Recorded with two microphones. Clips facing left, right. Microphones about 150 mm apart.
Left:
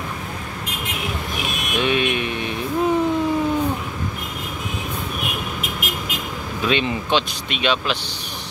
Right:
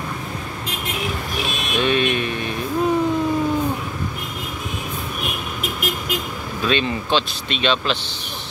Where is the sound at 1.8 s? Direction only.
15° left (ahead or behind).